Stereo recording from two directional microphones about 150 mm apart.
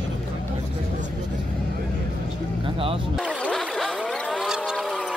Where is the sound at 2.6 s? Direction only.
35° right (ahead or behind).